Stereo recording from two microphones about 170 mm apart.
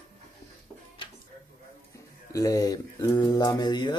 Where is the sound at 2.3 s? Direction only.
20° left (ahead or behind).